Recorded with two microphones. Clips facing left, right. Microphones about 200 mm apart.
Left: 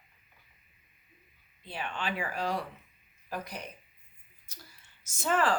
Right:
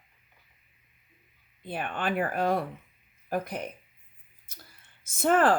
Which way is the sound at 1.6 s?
50° right (ahead or behind).